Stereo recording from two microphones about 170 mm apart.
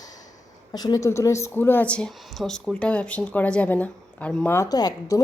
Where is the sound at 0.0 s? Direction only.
20° left (ahead or behind).